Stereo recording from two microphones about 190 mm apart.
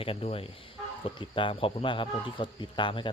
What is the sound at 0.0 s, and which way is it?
Speech, 30° left (ahead or behind).